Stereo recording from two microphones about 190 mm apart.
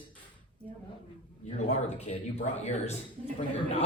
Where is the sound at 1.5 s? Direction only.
35° left (ahead or behind).